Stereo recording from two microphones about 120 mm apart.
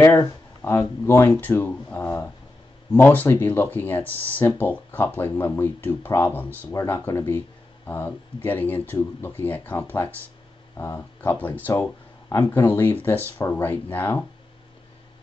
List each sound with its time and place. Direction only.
0.6 s speech: 20° left (ahead or behind)